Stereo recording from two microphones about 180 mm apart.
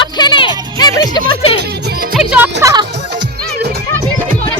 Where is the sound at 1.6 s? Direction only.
65° right (ahead or behind).